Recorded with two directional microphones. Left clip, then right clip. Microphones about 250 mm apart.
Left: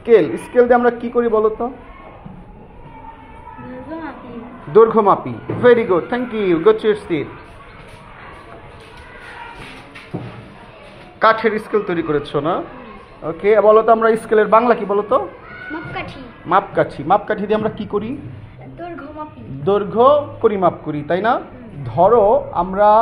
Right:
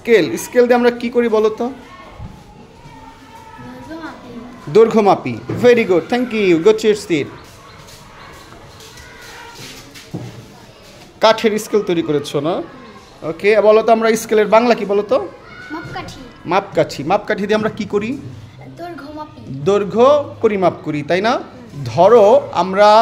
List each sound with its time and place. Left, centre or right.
0.0 s a man's voice: centre
4.7 s a man's voice: right
11.1 s a man's voice: right
19.6 s a man's voice: right